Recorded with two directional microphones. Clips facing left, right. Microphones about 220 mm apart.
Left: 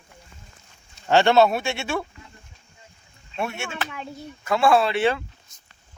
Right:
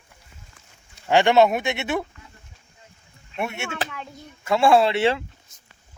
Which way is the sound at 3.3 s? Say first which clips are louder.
Right 1 dB; 20° right (ahead or behind).